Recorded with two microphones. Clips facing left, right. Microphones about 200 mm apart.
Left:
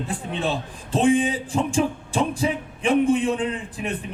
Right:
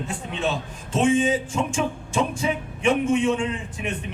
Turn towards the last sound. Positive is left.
turn(degrees=35)  # may be behind; listen again after turning